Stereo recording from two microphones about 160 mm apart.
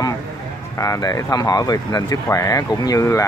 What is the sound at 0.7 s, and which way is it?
Speech, 20° left (ahead or behind).